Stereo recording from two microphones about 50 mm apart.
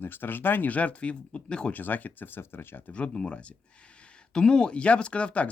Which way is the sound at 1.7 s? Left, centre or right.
Left.